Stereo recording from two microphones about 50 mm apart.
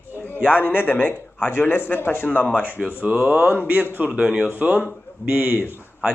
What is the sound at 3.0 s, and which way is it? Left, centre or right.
Speech, right.